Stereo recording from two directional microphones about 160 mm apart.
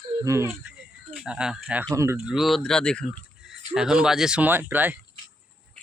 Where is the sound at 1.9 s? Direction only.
15° right (ahead or behind).